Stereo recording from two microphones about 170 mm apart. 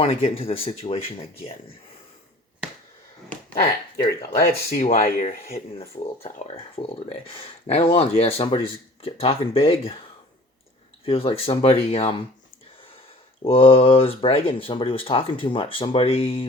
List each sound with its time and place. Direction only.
0.0 s speech: 35° left (ahead or behind)
3.9 s speech: 20° left (ahead or behind)
4.4 s speech: 55° left (ahead or behind)
6.2 s speech: 40° left (ahead or behind)
11.0 s speech: 35° left (ahead or behind)
13.4 s speech: 35° left (ahead or behind)